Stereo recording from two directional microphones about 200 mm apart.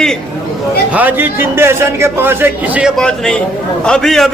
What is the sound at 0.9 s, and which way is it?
A man's voice, 10° right (ahead or behind).